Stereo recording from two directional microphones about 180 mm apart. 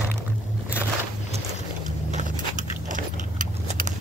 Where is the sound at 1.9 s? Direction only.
45° right (ahead or behind).